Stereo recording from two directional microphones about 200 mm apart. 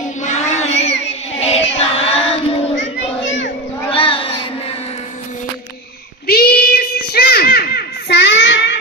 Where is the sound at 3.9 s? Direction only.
25° left (ahead or behind).